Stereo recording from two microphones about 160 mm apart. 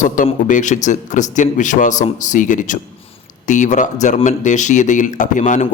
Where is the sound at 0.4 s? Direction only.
50° left (ahead or behind).